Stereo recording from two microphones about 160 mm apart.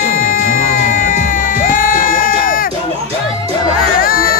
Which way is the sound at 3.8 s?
65° left (ahead or behind).